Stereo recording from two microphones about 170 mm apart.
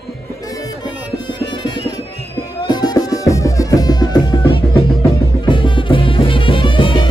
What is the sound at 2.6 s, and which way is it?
Music, 25° left (ahead or behind).